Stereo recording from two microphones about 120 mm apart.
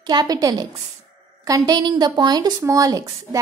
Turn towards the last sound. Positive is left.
turn(degrees=-30)  # may be behind; listen again after turning